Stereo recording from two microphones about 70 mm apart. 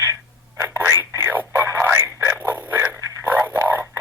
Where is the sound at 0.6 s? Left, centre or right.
Right.